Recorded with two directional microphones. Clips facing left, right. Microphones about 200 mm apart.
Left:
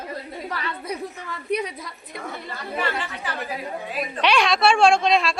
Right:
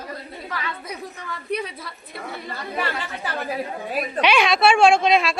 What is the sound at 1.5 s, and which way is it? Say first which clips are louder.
Speech: left 2 dB; 15° left (ahead or behind).